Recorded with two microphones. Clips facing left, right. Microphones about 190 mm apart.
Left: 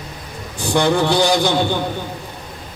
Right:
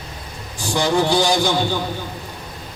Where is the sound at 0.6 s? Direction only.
60° left (ahead or behind).